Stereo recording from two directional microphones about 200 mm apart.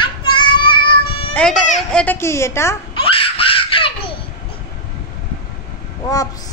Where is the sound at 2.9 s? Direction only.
25° left (ahead or behind).